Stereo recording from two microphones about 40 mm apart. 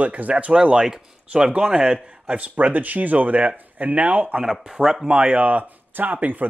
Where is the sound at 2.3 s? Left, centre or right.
Right.